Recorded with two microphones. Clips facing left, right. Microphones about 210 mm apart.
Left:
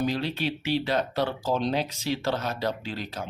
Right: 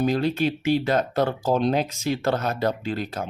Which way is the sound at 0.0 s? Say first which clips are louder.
Right 6 dB; 50° right (ahead or behind).